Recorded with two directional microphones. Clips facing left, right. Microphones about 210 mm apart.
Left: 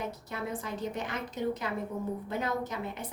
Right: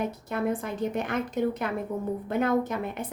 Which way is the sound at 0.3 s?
55° right (ahead or behind).